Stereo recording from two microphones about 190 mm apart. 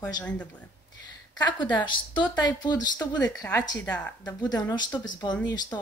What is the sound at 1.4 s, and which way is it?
Speech, 25° left (ahead or behind).